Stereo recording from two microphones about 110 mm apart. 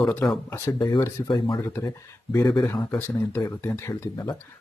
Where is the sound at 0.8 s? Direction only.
40° left (ahead or behind).